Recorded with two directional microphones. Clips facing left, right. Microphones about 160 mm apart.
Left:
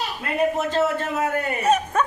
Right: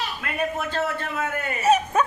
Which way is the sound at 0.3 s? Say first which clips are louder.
Left 6 dB; 35° left (ahead or behind).